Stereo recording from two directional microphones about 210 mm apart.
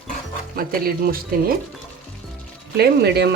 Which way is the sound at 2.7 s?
50° right (ahead or behind).